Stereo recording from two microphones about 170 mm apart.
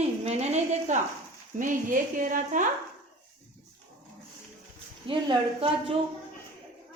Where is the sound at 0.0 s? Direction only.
40° right (ahead or behind).